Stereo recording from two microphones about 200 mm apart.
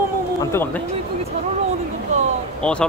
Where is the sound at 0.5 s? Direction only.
10° left (ahead or behind).